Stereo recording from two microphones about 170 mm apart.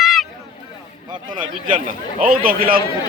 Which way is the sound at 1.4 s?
50° right (ahead or behind).